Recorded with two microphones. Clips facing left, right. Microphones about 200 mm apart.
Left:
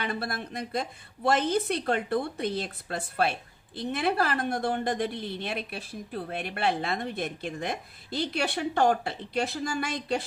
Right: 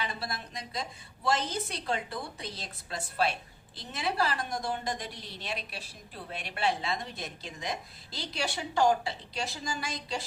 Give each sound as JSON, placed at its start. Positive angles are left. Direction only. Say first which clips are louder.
{"t": 0.0, "sound": "a woman's voice", "louder": "left 5 dB", "side_deg": 55}